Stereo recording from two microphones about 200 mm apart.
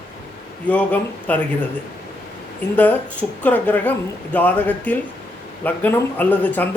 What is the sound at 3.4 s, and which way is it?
Speech, 10° left (ahead or behind).